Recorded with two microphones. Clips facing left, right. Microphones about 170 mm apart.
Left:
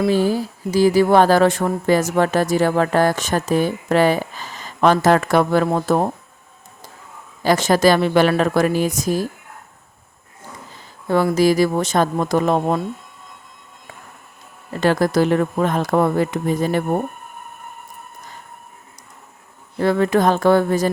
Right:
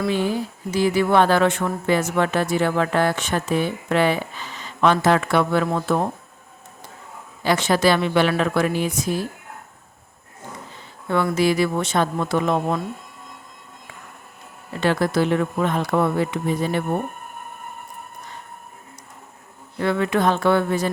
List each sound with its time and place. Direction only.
0.1 s speech: 35° left (ahead or behind)
7.4 s speech: 40° left (ahead or behind)
11.1 s speech: 35° left (ahead or behind)
14.7 s speech: 40° left (ahead or behind)
19.8 s speech: 40° left (ahead or behind)